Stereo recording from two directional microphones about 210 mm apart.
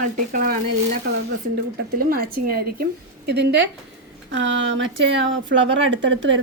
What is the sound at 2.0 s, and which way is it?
A woman's voice, 45° right (ahead or behind).